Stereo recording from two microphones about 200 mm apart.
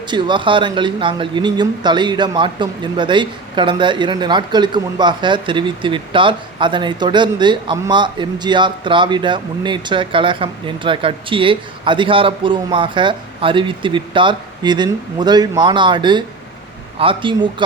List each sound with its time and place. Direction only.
0.1 s speech: 25° right (ahead or behind)